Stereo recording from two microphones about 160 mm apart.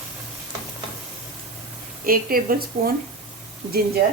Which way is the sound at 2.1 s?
65° right (ahead or behind).